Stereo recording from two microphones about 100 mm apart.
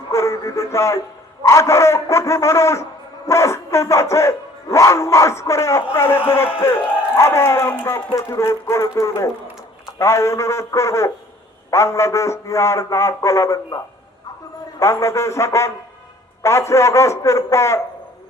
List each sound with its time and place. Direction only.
0.1 s speech: 30° left (ahead or behind)
14.8 s speech: 30° left (ahead or behind)